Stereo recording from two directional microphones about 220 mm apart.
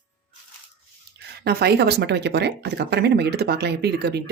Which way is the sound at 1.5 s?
45° right (ahead or behind).